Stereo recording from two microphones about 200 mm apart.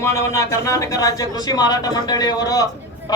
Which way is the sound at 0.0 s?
15° left (ahead or behind).